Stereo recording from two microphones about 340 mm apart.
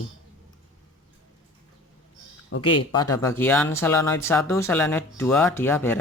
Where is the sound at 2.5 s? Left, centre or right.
Left.